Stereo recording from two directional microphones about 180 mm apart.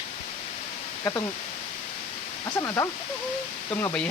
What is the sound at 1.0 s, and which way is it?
Speech, 20° left (ahead or behind).